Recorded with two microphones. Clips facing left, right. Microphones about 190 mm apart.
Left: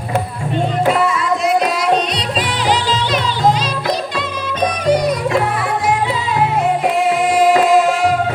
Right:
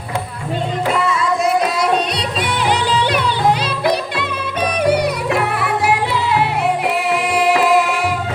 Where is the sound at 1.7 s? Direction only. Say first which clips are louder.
Left 1 dB; 55° right (ahead or behind).